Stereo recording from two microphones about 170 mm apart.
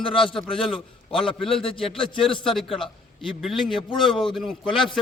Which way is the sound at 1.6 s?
30° left (ahead or behind).